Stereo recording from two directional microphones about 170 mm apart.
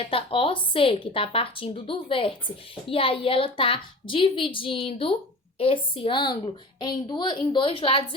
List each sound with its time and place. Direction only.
0.0 s a woman's voice: 30° left (ahead or behind)